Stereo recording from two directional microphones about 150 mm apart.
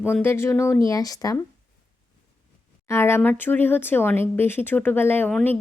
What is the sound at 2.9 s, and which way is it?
A woman's voice, 15° left (ahead or behind).